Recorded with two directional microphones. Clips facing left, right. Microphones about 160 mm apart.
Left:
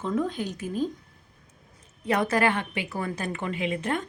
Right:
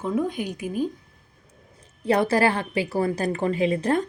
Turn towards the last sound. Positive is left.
turn(degrees=-35)  # may be behind; listen again after turning